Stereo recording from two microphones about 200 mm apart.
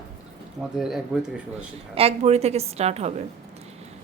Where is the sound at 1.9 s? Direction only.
30° right (ahead or behind).